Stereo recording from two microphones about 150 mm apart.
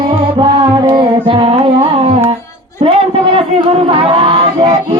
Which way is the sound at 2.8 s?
40° right (ahead or behind).